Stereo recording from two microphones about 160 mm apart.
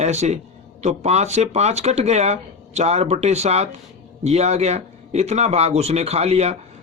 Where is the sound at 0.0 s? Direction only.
45° right (ahead or behind).